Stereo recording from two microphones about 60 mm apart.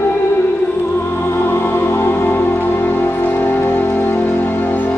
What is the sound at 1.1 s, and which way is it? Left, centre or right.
Music, left.